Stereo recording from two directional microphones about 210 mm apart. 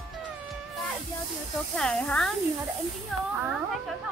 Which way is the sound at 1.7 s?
5° left (ahead or behind).